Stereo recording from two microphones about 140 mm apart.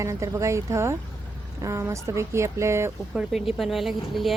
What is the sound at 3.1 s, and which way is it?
Speech, 5° right (ahead or behind).